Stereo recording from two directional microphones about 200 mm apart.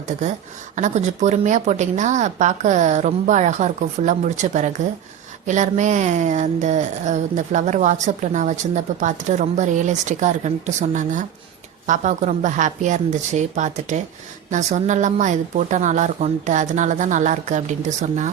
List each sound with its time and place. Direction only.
0.0 s speech: 35° right (ahead or behind)